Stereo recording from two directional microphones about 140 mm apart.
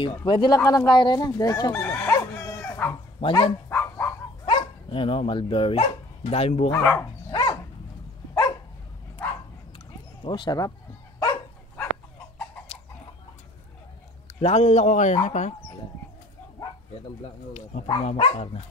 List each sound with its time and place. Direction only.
0.0 s speech: 35° left (ahead or behind)
1.7 s chicken: 10° left (ahead or behind)
3.2 s speech: 40° left (ahead or behind)
3.6 s dog: 15° left (ahead or behind)
4.5 s speech: 35° left (ahead or behind)
6.7 s speech: 15° left (ahead or behind)
7.2 s dog: 30° left (ahead or behind)
10.2 s speech: 35° left (ahead or behind)
11.1 s dog: 25° left (ahead or behind)
14.4 s speech: 50° left (ahead or behind)
18.0 s speech: 45° left (ahead or behind)